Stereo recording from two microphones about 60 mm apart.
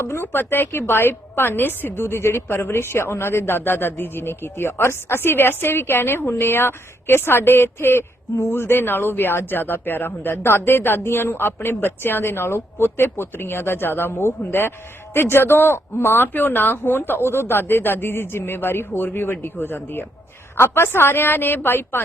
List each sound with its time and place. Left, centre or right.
0.0 s a woman's voice: left